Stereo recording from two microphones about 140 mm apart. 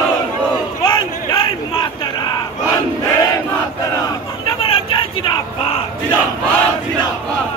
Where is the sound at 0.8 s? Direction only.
35° left (ahead or behind).